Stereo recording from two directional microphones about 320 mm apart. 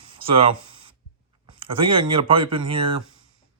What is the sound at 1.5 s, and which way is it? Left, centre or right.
Speech, centre.